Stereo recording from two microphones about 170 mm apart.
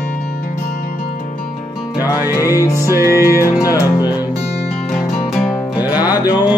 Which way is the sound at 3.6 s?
20° left (ahead or behind).